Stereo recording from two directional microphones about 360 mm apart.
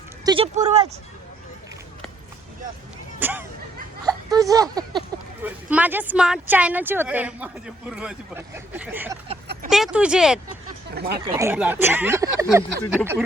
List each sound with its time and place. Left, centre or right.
0.3 s a sound: centre
3.2 s speech: centre
10.9 s speech: right
11.2 s speech: centre
12.8 s speech: centre